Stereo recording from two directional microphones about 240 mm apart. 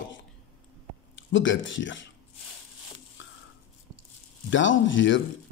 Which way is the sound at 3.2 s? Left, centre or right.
Left.